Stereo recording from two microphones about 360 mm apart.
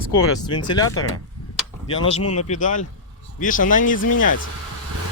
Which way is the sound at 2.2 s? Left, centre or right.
Left.